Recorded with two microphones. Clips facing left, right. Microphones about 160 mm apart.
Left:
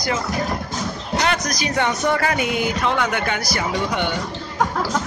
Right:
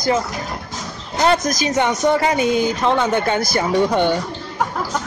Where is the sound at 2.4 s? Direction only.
30° right (ahead or behind).